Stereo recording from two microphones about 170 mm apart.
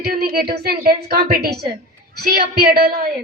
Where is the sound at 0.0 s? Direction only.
60° right (ahead or behind).